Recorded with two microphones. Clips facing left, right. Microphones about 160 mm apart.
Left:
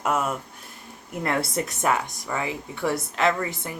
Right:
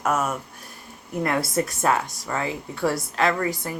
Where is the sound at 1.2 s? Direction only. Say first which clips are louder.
Right 2 dB; 20° left (ahead or behind).